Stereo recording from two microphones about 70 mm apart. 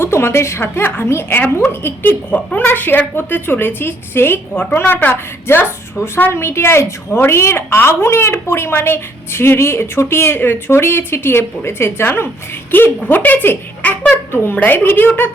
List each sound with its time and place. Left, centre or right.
0.0 s a woman's voice: left
14.0 s a sound: centre
14.4 s speech: left